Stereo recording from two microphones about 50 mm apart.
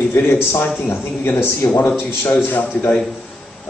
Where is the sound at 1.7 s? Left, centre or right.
Left.